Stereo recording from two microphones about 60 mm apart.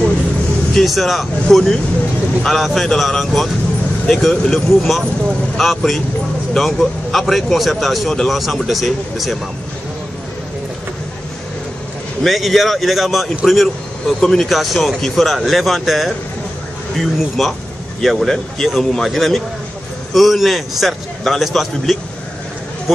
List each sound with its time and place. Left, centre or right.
0.7 s speech: centre
12.2 s speech: centre